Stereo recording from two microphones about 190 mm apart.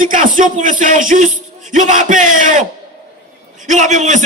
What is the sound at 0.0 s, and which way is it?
Speech, 45° right (ahead or behind).